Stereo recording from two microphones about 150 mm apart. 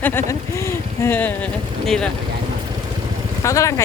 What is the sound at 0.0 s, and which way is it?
Speech, 15° left (ahead or behind).